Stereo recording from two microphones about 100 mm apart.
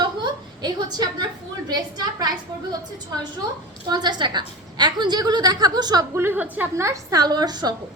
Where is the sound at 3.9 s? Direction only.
45° right (ahead or behind).